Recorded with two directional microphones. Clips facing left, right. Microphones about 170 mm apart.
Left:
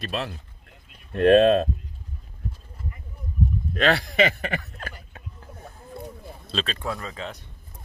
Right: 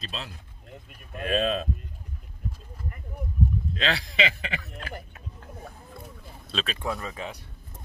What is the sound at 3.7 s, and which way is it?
Speech, 55° left (ahead or behind).